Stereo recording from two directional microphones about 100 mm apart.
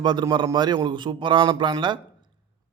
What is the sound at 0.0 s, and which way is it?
A man's voice, 50° right (ahead or behind).